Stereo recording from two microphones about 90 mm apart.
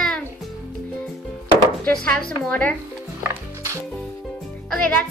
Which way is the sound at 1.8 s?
10° left (ahead or behind).